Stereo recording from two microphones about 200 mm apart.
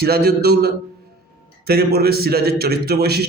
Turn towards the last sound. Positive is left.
turn(degrees=-55)  # may be behind; listen again after turning